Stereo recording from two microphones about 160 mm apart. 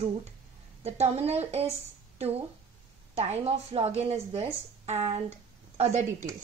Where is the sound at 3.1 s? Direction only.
40° right (ahead or behind).